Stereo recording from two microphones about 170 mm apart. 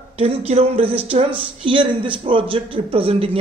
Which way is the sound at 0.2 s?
35° right (ahead or behind).